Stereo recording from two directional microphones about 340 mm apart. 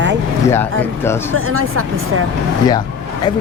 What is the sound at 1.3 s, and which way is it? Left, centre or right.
Speech, right.